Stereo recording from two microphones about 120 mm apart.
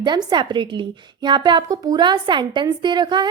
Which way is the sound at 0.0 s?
35° right (ahead or behind).